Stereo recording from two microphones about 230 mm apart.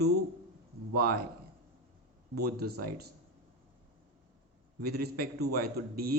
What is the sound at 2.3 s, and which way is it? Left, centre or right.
Speech, right.